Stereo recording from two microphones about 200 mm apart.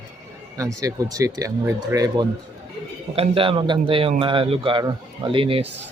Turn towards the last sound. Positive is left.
turn(degrees=-25)  # may be behind; listen again after turning